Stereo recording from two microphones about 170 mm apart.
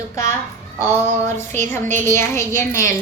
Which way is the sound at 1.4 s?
15° left (ahead or behind).